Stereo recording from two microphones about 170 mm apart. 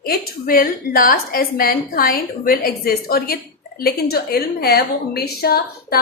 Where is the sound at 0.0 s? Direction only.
60° left (ahead or behind).